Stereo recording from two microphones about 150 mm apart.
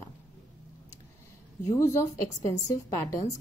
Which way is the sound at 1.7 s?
20° left (ahead or behind).